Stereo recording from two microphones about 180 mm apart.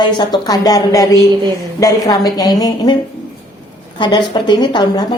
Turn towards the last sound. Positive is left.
turn(degrees=25)  # may be behind; listen again after turning